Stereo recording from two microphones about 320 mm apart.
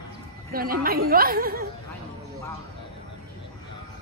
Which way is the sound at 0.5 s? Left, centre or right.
Right.